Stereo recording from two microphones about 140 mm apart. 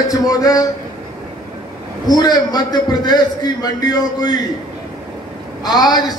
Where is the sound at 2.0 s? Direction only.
30° left (ahead or behind).